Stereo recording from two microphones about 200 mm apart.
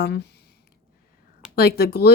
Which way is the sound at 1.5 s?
50° left (ahead or behind).